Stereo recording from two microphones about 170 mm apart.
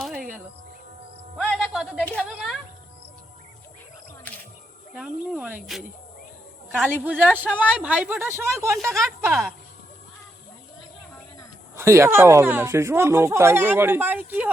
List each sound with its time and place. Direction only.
0.2 s music: 50° right (ahead or behind)
1.6 s a sound: centre (ahead or behind)
4.9 s speech: 5° right (ahead or behind)
6.8 s speech: 10° right (ahead or behind)
11.8 s speech: 15° right (ahead or behind)